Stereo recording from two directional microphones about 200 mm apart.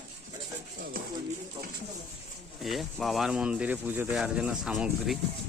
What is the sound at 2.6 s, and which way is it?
Speech, centre (ahead or behind).